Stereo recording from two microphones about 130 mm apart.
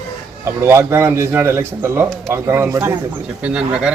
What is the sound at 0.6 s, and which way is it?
A man's voice, 20° right (ahead or behind).